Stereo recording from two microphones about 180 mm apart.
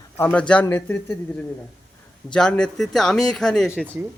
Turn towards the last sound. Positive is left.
turn(degrees=0)  # may be behind; listen again after turning